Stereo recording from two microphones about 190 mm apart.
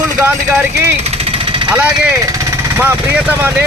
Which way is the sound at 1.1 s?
30° right (ahead or behind).